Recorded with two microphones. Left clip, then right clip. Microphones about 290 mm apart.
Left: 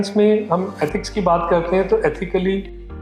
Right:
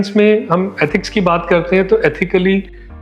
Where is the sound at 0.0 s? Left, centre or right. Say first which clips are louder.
Right 4 dB; right.